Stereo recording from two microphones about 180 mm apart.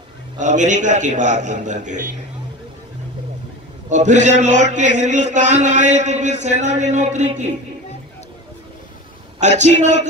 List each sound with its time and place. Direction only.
0.4 s a man's voice: 45° right (ahead or behind)
3.9 s a man's voice: 40° right (ahead or behind)
9.6 s a man's voice: 40° right (ahead or behind)